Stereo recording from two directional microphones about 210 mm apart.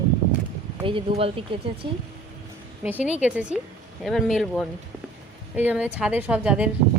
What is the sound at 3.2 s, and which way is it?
A woman's voice, 5° right (ahead or behind).